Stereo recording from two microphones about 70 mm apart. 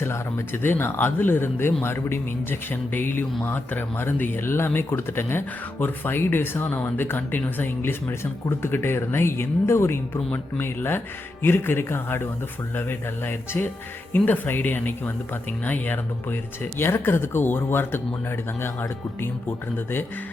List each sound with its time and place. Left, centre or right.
0.0 s speech: left
10.3 s speech: left